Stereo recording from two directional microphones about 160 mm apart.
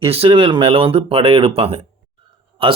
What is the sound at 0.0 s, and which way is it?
Speech, 35° right (ahead or behind).